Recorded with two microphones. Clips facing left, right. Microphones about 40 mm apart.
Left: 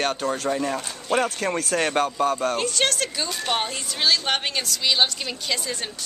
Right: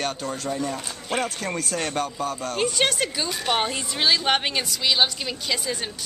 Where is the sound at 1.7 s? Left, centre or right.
Left.